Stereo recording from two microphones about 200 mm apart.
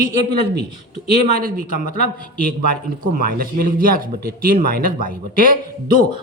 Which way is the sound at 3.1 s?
45° right (ahead or behind).